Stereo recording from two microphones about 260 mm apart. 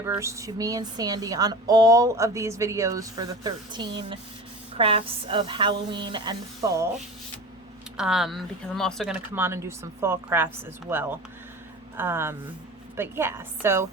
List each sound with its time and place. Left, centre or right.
0.0 s a woman's voice: centre
7.9 s speech: centre